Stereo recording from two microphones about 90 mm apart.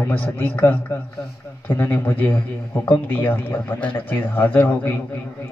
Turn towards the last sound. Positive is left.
turn(degrees=20)  # may be behind; listen again after turning